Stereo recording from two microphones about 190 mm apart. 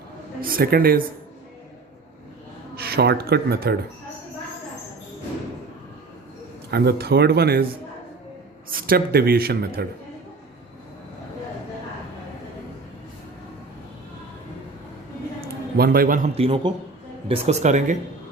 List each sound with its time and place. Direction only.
0.4 s speech: 50° right (ahead or behind)
2.7 s speech: 55° right (ahead or behind)
6.7 s speech: 60° right (ahead or behind)
8.7 s speech: 50° right (ahead or behind)
15.4 s a sound: 50° right (ahead or behind)
16.3 s speech: 30° right (ahead or behind)